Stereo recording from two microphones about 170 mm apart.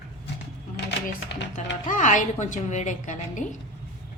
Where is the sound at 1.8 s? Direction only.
50° left (ahead or behind).